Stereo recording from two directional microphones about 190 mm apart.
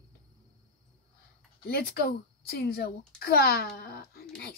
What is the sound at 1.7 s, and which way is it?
Speech, 55° left (ahead or behind).